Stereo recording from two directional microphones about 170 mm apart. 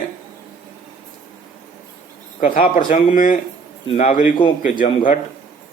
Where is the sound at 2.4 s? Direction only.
50° left (ahead or behind).